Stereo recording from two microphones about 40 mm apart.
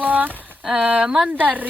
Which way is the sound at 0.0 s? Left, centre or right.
Right.